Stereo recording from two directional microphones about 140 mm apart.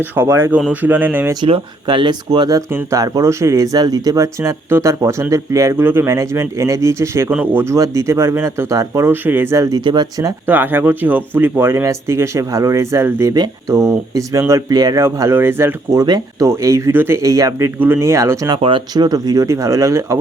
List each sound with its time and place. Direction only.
0.0 s speech: 15° right (ahead or behind)
1.5 s speech: 40° right (ahead or behind)
10.4 s speech: 15° right (ahead or behind)
17.7 s speech: 15° right (ahead or behind)